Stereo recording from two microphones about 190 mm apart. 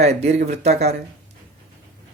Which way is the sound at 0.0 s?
35° right (ahead or behind).